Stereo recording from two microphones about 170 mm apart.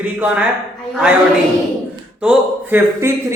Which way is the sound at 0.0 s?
10° right (ahead or behind).